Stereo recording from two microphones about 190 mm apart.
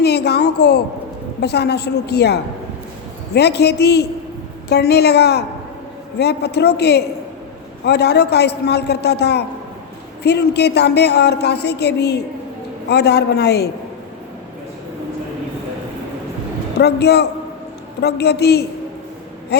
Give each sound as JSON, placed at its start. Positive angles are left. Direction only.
{"t": 0.0, "sound": "a woman's voice", "side_deg": 60}
{"t": 16.7, "sound": "a woman's voice", "side_deg": 60}